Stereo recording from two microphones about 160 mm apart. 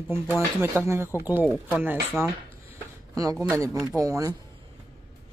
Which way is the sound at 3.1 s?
20° right (ahead or behind).